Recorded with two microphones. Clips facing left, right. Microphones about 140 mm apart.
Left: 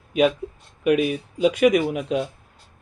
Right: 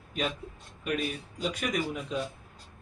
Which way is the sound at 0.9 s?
75° left (ahead or behind).